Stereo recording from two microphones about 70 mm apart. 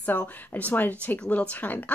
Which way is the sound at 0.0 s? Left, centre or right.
Left.